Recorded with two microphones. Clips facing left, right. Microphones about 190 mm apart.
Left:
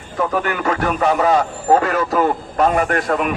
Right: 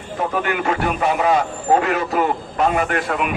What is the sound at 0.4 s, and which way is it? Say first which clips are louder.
A man's voice: left 1 dB; 40° left (ahead or behind).